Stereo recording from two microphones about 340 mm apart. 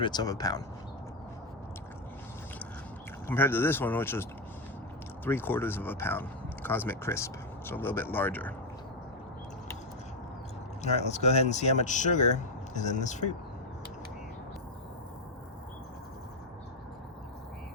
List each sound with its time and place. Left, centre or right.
0.0 s speech: centre
3.2 s speech: centre
10.8 s speech: centre